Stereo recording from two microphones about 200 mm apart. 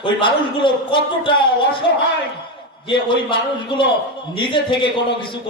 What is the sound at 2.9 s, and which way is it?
Speech, 25° left (ahead or behind).